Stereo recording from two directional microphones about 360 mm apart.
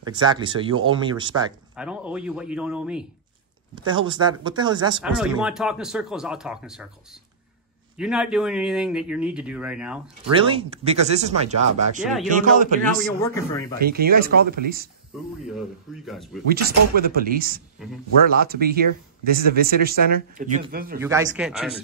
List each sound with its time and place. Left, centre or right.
0.0 s speech: centre
3.7 s speech: centre
8.0 s speech: centre
10.5 s speech: centre
12.0 s speech: centre
12.4 s speech: right
13.2 s a man's voice: centre
13.7 s speech: right
15.1 s speech: centre
16.4 s speech: right
17.8 s speech: centre
18.4 s speech: right
21.0 s speech: centre